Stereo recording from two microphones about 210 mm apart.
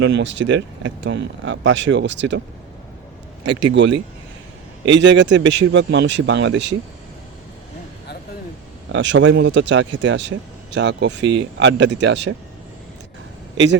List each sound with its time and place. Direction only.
0.0 s speech: 60° right (ahead or behind)
3.4 s speech: 60° right (ahead or behind)
8.9 s speech: 60° right (ahead or behind)